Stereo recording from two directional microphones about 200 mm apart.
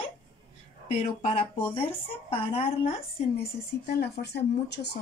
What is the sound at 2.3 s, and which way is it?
Speech, 30° left (ahead or behind).